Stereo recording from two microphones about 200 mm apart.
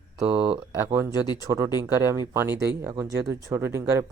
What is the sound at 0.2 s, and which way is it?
Speech, 15° right (ahead or behind).